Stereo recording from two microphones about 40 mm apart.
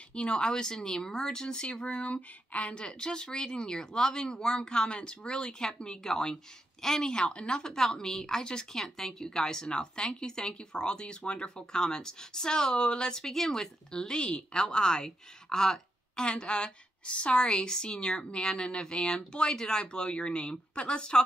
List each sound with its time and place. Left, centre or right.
0.1 s a woman's voice: left
16.3 s a woman's voice: left